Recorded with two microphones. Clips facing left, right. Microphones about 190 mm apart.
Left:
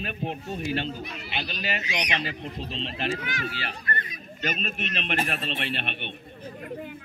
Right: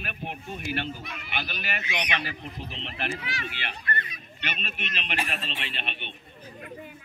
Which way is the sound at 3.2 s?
40° left (ahead or behind).